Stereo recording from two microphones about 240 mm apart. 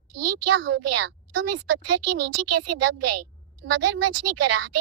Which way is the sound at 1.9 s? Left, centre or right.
Right.